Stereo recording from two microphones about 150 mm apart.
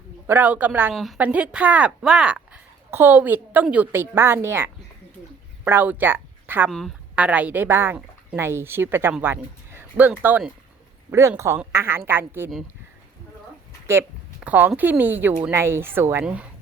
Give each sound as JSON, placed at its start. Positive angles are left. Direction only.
{"t": 0.3, "sound": "speech", "side_deg": -10}
{"t": 0.9, "sound": "speech", "side_deg": 0}
{"t": 6.7, "sound": "speech", "side_deg": 0}
{"t": 7.2, "sound": "speech", "side_deg": -10}
{"t": 14.4, "sound": "speech", "side_deg": -10}